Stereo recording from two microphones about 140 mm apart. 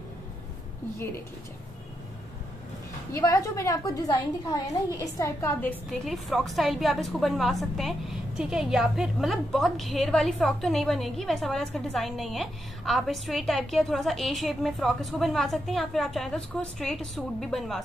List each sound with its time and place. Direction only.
3.1 s a woman's voice: 20° left (ahead or behind)
5.9 s a woman's voice: centre (ahead or behind)